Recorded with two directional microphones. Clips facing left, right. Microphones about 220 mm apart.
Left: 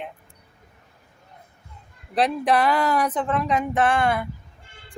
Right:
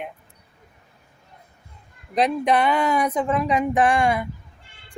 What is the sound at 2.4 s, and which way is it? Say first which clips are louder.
Speech: right 1 dB; 10° right (ahead or behind).